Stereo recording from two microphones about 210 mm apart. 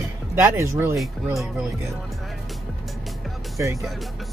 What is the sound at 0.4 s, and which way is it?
Speech, 15° right (ahead or behind).